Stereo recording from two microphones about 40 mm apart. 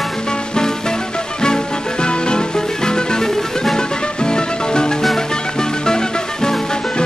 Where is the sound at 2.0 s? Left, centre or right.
Left.